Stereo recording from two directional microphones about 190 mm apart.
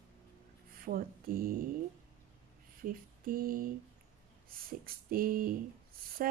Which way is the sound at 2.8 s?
50° right (ahead or behind).